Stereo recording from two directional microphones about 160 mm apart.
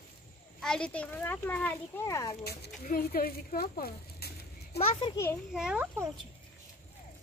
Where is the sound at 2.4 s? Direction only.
75° left (ahead or behind).